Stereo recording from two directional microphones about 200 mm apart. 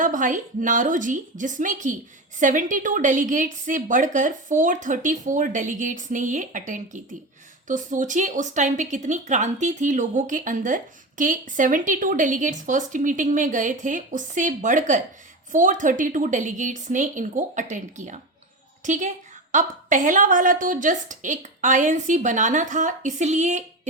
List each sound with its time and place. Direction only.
0.0 s a woman's voice: 40° right (ahead or behind)